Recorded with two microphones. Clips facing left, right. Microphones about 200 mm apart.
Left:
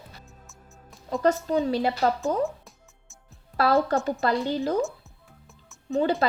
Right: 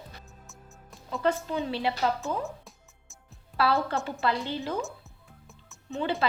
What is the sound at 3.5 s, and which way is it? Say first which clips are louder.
A woman's voice: left 4 dB; 45° left (ahead or behind).